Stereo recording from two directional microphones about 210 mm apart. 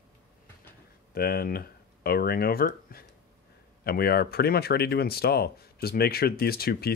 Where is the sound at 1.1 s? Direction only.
45° left (ahead or behind).